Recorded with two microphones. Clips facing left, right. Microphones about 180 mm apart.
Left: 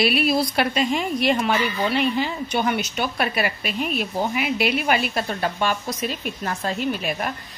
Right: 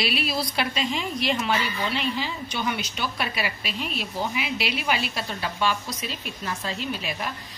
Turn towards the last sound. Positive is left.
turn(degrees=50)  # may be behind; listen again after turning